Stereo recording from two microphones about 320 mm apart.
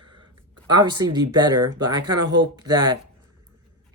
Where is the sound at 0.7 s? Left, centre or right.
Centre.